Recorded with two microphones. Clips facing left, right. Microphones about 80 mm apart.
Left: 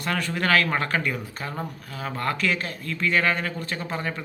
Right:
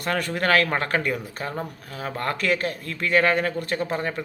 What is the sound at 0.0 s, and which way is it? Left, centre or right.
Speech, right.